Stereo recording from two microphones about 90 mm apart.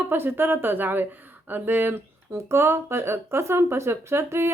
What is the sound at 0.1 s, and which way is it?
Speech, 25° right (ahead or behind).